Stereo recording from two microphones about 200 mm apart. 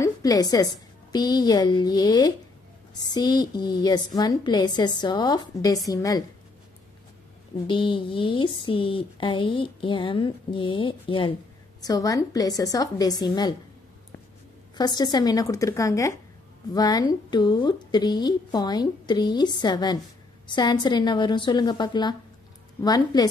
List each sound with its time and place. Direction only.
0.0 s a woman's voice: 20° left (ahead or behind)
7.6 s a woman's voice: 25° left (ahead or behind)
14.8 s a woman's voice: 20° left (ahead or behind)